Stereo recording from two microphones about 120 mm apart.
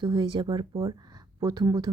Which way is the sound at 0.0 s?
40° right (ahead or behind).